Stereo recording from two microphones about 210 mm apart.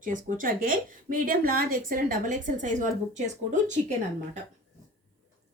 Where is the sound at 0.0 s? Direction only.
40° right (ahead or behind).